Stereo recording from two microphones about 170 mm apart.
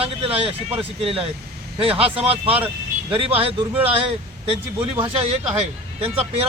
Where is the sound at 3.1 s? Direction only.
35° right (ahead or behind).